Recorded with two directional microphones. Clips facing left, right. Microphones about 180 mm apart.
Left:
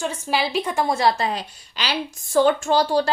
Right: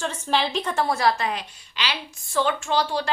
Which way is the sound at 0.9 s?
30° left (ahead or behind).